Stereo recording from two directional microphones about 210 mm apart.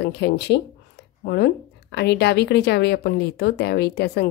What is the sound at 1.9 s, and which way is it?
Speech, 50° left (ahead or behind).